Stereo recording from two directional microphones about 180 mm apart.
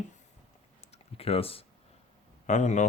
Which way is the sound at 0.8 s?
35° left (ahead or behind).